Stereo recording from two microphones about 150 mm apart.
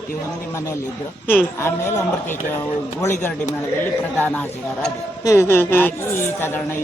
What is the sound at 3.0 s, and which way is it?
Speech, 15° left (ahead or behind).